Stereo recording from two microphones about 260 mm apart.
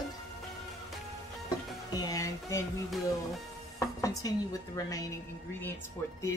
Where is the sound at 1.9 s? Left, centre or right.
Centre.